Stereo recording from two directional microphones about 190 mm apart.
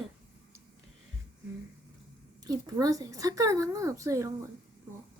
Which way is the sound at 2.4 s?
20° right (ahead or behind).